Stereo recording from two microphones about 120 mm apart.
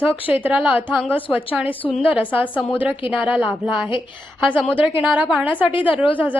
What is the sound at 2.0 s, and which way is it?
Speech, 15° right (ahead or behind).